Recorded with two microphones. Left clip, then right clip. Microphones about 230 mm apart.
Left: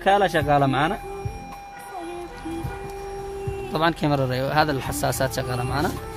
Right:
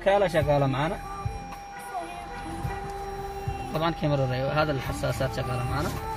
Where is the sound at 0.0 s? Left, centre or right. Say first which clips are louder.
Left 3 dB; left.